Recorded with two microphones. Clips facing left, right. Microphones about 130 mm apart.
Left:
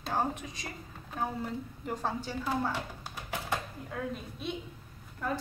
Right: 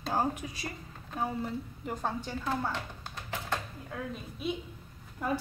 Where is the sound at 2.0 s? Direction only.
5° left (ahead or behind).